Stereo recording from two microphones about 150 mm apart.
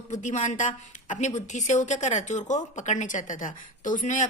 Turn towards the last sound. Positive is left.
turn(degrees=55)  # may be behind; listen again after turning